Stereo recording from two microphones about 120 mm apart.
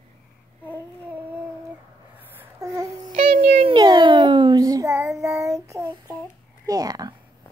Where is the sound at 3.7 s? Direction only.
40° right (ahead or behind).